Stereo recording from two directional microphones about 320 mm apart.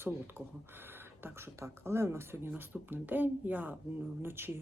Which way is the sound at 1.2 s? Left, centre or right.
Centre.